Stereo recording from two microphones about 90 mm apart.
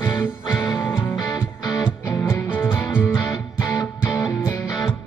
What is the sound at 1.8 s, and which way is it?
Music, 20° left (ahead or behind).